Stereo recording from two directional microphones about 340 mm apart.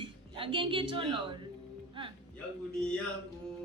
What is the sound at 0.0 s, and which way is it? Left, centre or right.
A woman's voice, centre.